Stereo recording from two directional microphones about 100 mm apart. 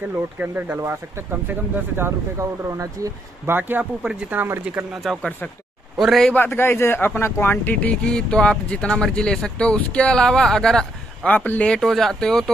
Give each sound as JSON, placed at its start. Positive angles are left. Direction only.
{"t": 0.4, "sound": "speech", "side_deg": -20}
{"t": 3.5, "sound": "speech", "side_deg": -20}
{"t": 5.1, "sound": "a man's voice", "side_deg": 0}
{"t": 6.3, "sound": "speech", "side_deg": 20}
{"t": 11.3, "sound": "speech", "side_deg": 15}